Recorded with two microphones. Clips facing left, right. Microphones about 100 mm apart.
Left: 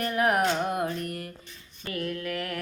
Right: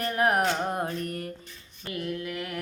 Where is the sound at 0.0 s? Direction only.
35° right (ahead or behind).